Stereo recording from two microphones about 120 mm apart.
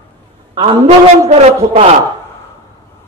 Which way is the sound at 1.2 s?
65° right (ahead or behind).